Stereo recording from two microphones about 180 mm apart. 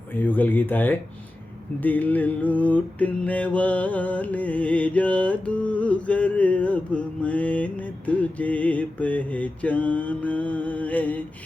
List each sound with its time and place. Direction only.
0.1 s mantra: 10° left (ahead or behind)